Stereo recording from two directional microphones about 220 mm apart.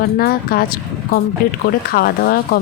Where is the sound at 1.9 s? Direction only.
45° left (ahead or behind).